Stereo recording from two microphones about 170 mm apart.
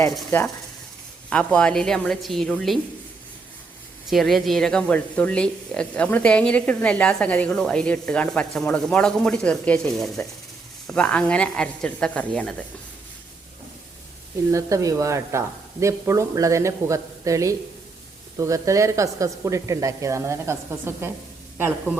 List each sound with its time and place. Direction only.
1.3 s speech: 5° left (ahead or behind)
4.1 s speech: centre (ahead or behind)
14.5 s speech: 20° right (ahead or behind)